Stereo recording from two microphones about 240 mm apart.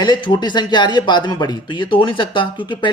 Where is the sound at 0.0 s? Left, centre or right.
Centre.